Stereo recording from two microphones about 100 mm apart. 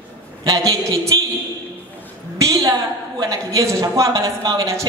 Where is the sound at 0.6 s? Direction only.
30° right (ahead or behind).